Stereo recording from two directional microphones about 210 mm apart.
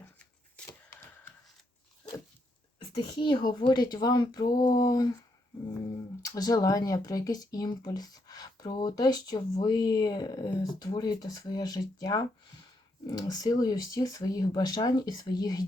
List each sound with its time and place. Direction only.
0.0 s shuffling cards: 5° left (ahead or behind)
2.7 s speech: 25° left (ahead or behind)
6.2 s speech: 15° left (ahead or behind)